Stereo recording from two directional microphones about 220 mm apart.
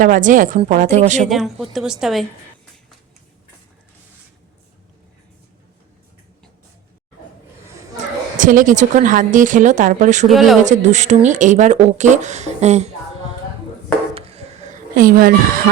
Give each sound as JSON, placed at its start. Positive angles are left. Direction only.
{"t": 0.0, "sound": "speech", "side_deg": -35}
{"t": 1.2, "sound": "a woman's voice", "side_deg": 0}
{"t": 7.7, "sound": "a sound", "side_deg": -15}
{"t": 8.4, "sound": "speech", "side_deg": -35}
{"t": 10.2, "sound": "a woman's voice", "side_deg": 0}
{"t": 10.6, "sound": "speech", "side_deg": -35}
{"t": 14.1, "sound": "a sound", "side_deg": -25}